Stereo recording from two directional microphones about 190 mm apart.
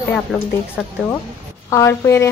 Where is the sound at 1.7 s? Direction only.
15° left (ahead or behind).